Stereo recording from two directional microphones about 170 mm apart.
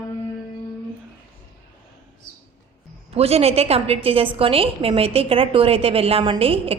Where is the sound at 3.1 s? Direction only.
35° right (ahead or behind).